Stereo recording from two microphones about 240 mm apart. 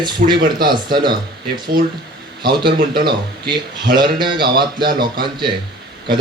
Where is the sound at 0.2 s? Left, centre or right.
Right.